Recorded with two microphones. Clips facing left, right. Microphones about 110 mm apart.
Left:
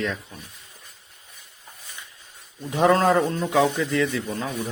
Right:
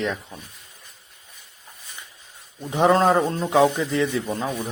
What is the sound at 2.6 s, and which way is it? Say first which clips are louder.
Sheep: right 1 dB; 20° right (ahead or behind).